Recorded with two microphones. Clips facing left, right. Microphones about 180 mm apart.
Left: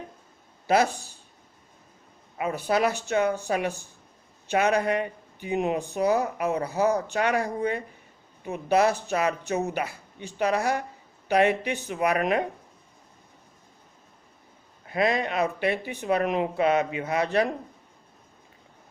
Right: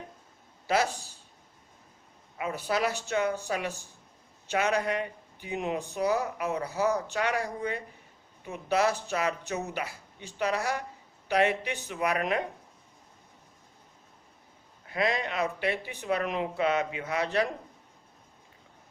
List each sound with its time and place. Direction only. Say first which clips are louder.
0.7 s speech: left 5 dB; 55° left (ahead or behind)
2.4 s speech: left 5 dB; 55° left (ahead or behind)
14.9 s speech: left 4 dB; 55° left (ahead or behind)